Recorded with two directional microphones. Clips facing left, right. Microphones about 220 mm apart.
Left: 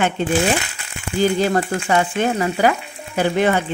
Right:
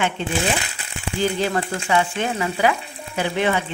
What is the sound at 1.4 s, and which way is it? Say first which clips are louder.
Speech: left 4 dB; 40° left (ahead or behind).